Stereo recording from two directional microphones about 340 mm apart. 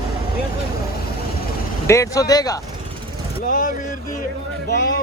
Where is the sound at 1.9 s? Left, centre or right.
Centre.